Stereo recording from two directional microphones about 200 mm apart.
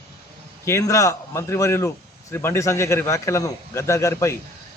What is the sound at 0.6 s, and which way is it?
A man's voice, 15° left (ahead or behind).